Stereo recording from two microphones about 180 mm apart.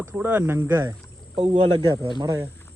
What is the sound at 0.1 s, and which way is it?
Speech, 10° right (ahead or behind).